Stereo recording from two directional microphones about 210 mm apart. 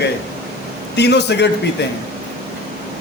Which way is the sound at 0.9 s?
55° left (ahead or behind).